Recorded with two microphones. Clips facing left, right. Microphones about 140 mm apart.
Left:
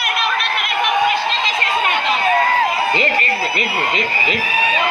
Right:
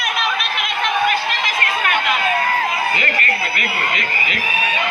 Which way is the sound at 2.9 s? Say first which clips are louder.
Left 3 dB; 30° left (ahead or behind).